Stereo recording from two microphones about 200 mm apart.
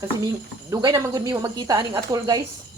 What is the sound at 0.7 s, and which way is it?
Speech, 15° right (ahead or behind).